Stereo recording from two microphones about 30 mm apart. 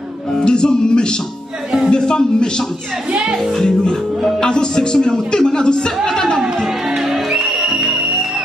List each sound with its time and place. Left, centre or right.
0.3 s music: left
1.9 s a man's voice: left
3.6 s a man's voice: left
7.0 s music: centre